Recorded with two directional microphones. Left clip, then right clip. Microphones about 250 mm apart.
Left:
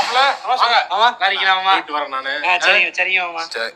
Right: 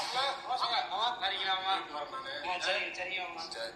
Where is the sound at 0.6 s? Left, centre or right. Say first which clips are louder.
Left 19 dB; left.